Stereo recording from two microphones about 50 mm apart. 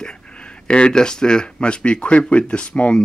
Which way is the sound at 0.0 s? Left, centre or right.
Centre.